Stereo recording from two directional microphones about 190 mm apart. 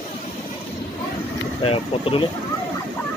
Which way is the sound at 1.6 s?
30° left (ahead or behind).